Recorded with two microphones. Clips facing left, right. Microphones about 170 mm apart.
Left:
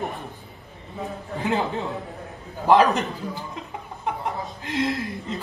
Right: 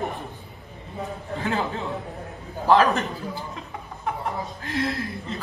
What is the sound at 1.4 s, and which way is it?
A woman's voice, 20° left (ahead or behind).